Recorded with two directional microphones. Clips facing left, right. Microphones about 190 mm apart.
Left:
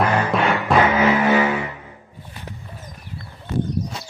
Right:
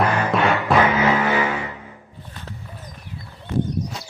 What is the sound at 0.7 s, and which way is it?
Vehicle, centre (ahead or behind).